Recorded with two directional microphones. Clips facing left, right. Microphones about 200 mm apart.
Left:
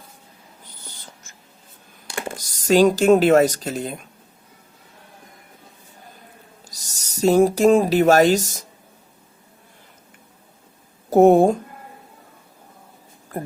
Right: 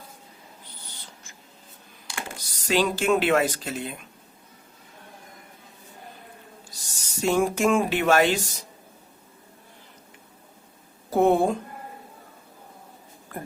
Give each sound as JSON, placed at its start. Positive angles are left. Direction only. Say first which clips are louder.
{"t": 2.5, "sound": "speech", "louder": "left 9 dB", "side_deg": 45}
{"t": 6.7, "sound": "speech", "louder": "even", "side_deg": 40}
{"t": 11.1, "sound": "speech", "louder": "left 7 dB", "side_deg": 45}